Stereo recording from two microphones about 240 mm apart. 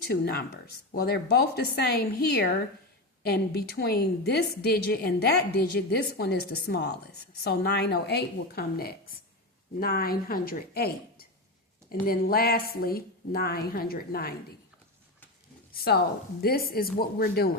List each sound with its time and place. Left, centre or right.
0.1 s a woman's voice: left
15.7 s a woman's voice: left